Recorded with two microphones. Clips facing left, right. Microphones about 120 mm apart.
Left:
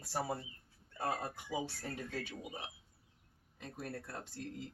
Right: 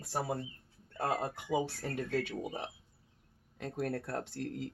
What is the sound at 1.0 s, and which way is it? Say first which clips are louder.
Speech: right 4 dB; 65° right (ahead or behind).